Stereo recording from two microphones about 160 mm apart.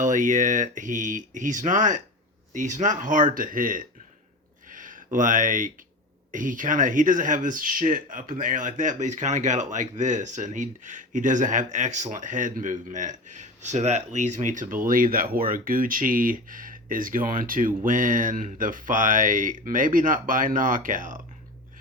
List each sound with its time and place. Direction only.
0.0 s speech: 50° right (ahead or behind)
4.7 s a sound: 55° right (ahead or behind)
5.1 s speech: 55° right (ahead or behind)